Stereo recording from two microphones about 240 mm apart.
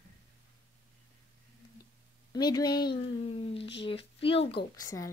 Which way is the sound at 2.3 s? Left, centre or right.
Centre.